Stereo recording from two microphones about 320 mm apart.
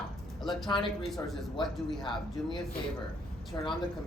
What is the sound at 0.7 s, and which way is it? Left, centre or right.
Speech, centre.